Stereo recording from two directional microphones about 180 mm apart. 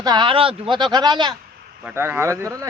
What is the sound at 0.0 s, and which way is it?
Speech, 25° right (ahead or behind).